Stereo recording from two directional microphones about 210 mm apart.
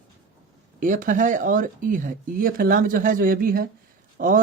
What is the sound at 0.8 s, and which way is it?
Speech, 40° right (ahead or behind).